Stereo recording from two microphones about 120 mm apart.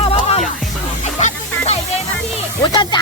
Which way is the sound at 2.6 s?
40° left (ahead or behind).